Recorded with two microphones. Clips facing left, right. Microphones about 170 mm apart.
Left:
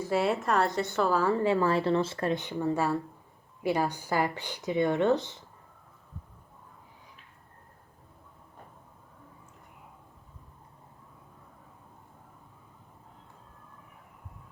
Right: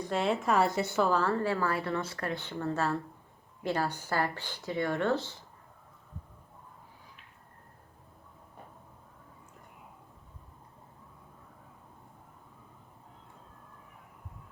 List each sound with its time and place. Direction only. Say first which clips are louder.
0.0 s a woman's voice: left 2 dB; 5° left (ahead or behind)
1.2 s speech: left 4 dB; 15° left (ahead or behind)